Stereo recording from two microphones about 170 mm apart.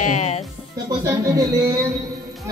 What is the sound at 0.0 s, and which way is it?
Music, 45° left (ahead or behind).